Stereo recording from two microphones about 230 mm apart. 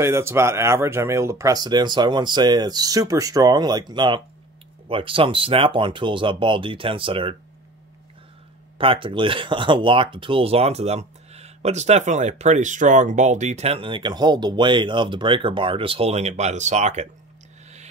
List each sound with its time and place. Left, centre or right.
0.0 s speech: centre
8.7 s speech: right